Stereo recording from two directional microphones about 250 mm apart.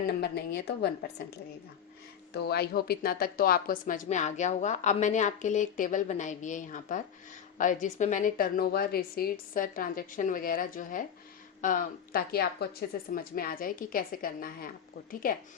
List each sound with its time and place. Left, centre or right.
0.0 s a woman's voice: left